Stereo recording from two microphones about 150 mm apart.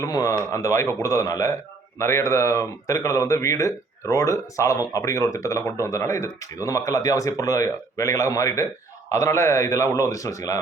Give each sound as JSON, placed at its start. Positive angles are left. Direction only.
{"t": 0.0, "sound": "speech", "side_deg": 25}